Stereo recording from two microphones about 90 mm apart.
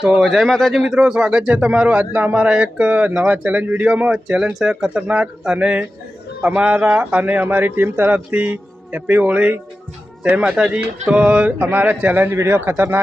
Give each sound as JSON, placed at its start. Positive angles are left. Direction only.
{"t": 0.0, "sound": "a man's voice", "side_deg": -10}